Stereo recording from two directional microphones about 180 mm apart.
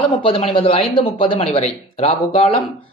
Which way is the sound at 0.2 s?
30° left (ahead or behind).